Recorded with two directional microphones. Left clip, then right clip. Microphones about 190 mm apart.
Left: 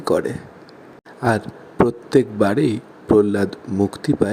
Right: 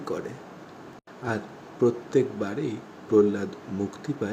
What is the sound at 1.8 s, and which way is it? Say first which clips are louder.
Speech: left 6 dB; 40° left (ahead or behind).